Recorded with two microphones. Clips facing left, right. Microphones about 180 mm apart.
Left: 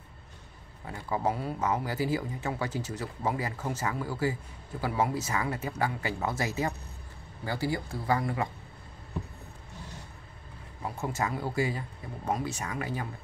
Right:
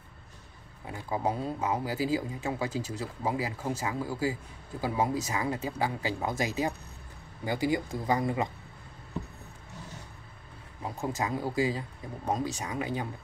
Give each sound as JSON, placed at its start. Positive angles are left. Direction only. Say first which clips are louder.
{"t": 0.8, "sound": "speech", "louder": "left 1 dB", "side_deg": -20}
{"t": 11.0, "sound": "speech", "louder": "right 1 dB", "side_deg": -15}